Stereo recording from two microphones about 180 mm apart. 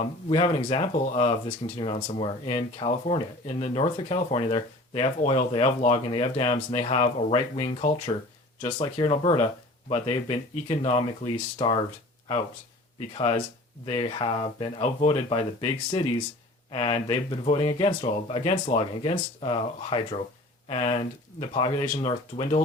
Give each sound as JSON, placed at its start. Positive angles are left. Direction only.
{"t": 0.0, "sound": "speech", "side_deg": 25}
{"t": 13.1, "sound": "speech", "side_deg": 30}